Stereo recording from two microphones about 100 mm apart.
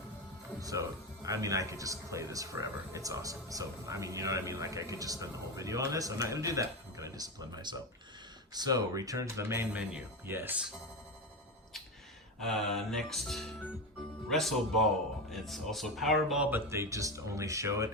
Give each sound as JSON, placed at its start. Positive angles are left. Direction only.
{"t": 0.6, "sound": "speech", "side_deg": -35}
{"t": 9.7, "sound": "speech", "side_deg": -10}
{"t": 12.4, "sound": "speech", "side_deg": 5}
{"t": 16.5, "sound": "speech", "side_deg": -25}